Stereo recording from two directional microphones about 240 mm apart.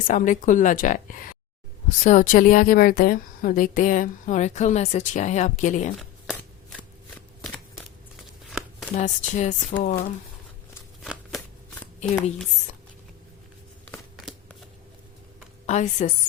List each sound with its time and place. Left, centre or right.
0.1 s speech: left
7.4 s shuffling cards: centre
9.0 s speech: left
11.0 s a sound: centre
15.6 s a woman's voice: left